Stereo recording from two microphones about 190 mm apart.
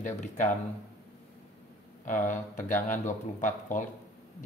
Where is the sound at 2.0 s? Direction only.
40° left (ahead or behind).